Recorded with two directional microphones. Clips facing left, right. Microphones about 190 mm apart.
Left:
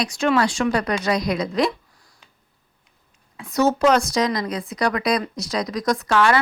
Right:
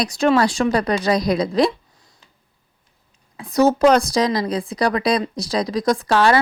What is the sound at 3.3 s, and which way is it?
Speech, 35° right (ahead or behind).